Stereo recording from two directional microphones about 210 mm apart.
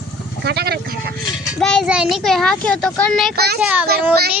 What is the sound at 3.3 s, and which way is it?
Speech, 50° right (ahead or behind).